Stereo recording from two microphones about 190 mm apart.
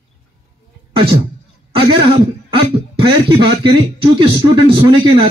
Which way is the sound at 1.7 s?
25° right (ahead or behind).